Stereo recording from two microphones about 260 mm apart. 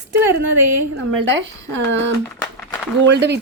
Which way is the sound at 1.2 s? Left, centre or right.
Right.